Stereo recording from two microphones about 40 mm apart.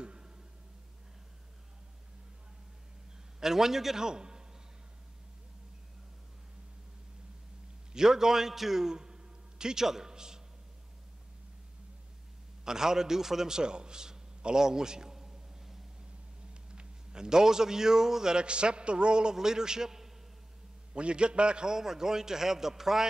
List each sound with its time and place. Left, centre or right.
0.0 s a sound: right
3.3 s a man's voice: centre
7.9 s a man's voice: centre
12.6 s a man's voice: centre
20.9 s a man's voice: right
21.7 s a man's voice: centre